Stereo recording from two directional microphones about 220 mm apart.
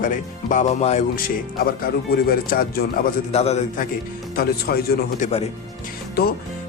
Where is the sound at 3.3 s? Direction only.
30° left (ahead or behind).